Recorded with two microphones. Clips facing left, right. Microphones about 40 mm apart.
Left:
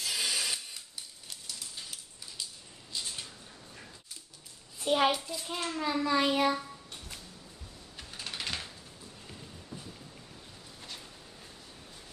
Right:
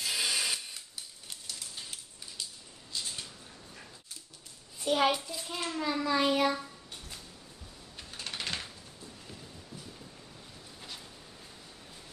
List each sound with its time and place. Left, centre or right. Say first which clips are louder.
0.0 s a sound: right 1 dB; right
2.9 s a sound: even; centre
4.8 s a child's voice: left 1 dB; centre
5.1 s a child's voice: even; centre
5.5 s a child's voice: left 1 dB; centre
8.3 s typing: even; centre